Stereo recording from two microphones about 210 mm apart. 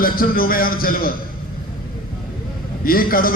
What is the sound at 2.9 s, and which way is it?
Speech, 45° left (ahead or behind).